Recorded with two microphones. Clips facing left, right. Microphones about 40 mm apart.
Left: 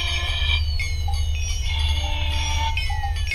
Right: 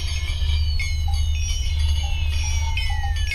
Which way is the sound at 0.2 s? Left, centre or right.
Left.